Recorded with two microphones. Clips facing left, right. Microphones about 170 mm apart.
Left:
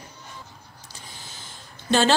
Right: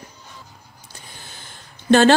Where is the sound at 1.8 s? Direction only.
55° right (ahead or behind).